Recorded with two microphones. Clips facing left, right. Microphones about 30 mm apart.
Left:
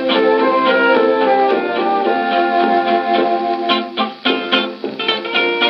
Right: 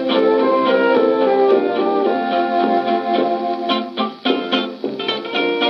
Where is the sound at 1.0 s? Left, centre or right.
Centre.